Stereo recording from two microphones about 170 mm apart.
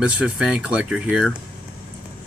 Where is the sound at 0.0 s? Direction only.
5° right (ahead or behind).